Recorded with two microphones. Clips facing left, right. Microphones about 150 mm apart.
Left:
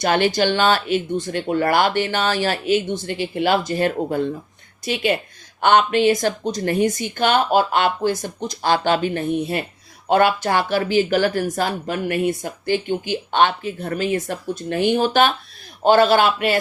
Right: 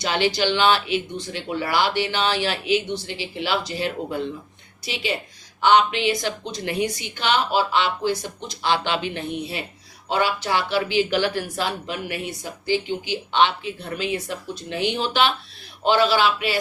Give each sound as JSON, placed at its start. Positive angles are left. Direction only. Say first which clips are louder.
{"t": 0.0, "sound": "speech", "louder": "left 4 dB", "side_deg": 50}